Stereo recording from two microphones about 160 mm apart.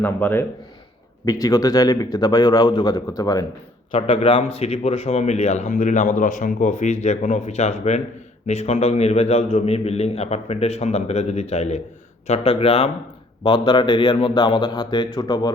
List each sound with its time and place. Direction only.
0.0 s a man's voice: 10° left (ahead or behind)
4.1 s a man's voice: 35° left (ahead or behind)